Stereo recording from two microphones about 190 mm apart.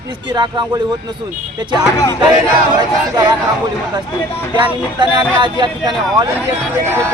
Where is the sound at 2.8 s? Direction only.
20° right (ahead or behind).